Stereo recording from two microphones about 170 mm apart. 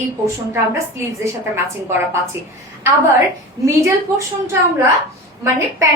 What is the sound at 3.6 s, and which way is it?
A woman's voice, 15° right (ahead or behind).